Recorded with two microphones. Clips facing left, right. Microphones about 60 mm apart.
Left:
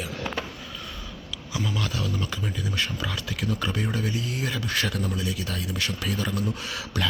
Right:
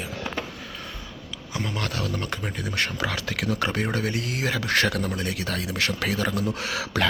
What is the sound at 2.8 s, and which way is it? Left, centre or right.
Speech, right.